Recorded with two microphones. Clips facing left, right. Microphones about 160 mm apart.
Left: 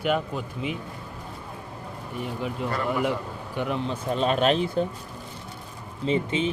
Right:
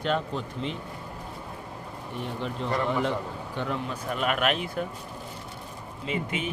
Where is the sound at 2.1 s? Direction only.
5° left (ahead or behind); by 4.9 s 30° left (ahead or behind).